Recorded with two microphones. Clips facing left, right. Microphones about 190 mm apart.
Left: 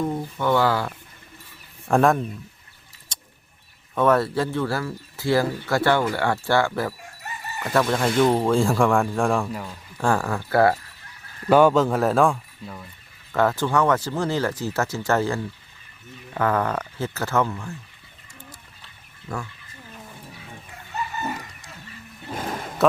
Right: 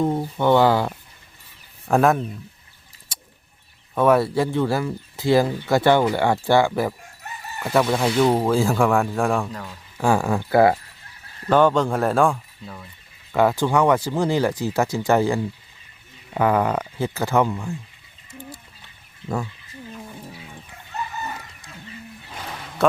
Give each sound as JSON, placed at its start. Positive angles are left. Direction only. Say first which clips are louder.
{"t": 0.3, "sound": "speech", "louder": "right 4 dB", "side_deg": -20}
{"t": 1.9, "sound": "speech", "louder": "right 1 dB", "side_deg": 0}
{"t": 3.1, "sound": "a sound", "louder": "right 1 dB", "side_deg": -10}
{"t": 3.9, "sound": "speech", "louder": "right 2 dB", "side_deg": -10}
{"t": 10.0, "sound": "speech", "louder": "right 3 dB", "side_deg": -10}
{"t": 11.4, "sound": "speech", "louder": "left 1 dB", "side_deg": 10}
{"t": 13.3, "sound": "speech", "louder": "right 2 dB", "side_deg": -15}
{"t": 22.3, "sound": "roar", "louder": "left 7 dB", "side_deg": 50}
{"t": 22.8, "sound": "a sound", "louder": "even", "side_deg": 0}